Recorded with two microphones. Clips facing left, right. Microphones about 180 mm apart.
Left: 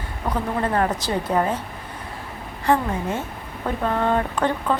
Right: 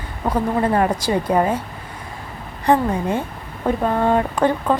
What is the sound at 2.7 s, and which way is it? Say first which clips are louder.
Speech: right 3 dB; 20° right (ahead or behind).